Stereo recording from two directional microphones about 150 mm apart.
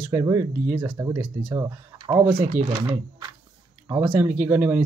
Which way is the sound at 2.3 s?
65° right (ahead or behind).